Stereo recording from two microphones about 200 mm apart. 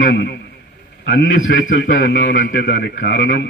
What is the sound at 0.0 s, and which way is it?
A man's voice, 60° left (ahead or behind).